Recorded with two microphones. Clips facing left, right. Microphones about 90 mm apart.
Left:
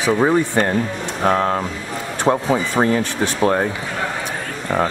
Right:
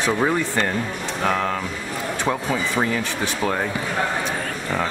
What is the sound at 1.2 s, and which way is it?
Speech, 35° left (ahead or behind).